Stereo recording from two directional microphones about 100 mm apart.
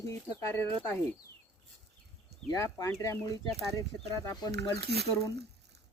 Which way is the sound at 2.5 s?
35° left (ahead or behind).